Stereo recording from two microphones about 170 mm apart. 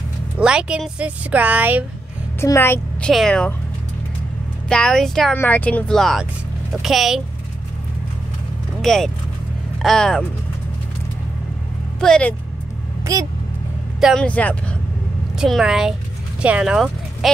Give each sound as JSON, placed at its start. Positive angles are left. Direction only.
{"t": 0.4, "sound": "a woman's voice", "side_deg": -5}
{"t": 2.4, "sound": "speech", "side_deg": 15}
{"t": 3.1, "sound": "a woman's voice", "side_deg": 5}
{"t": 4.6, "sound": "a woman's voice", "side_deg": 5}
{"t": 8.8, "sound": "a woman's voice", "side_deg": 0}
{"t": 12.0, "sound": "a woman's voice", "side_deg": 5}
{"t": 13.0, "sound": "speech", "side_deg": -20}
{"t": 14.0, "sound": "a woman's voice", "side_deg": 5}